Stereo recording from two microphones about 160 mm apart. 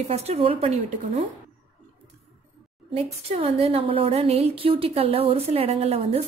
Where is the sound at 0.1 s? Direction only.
40° right (ahead or behind).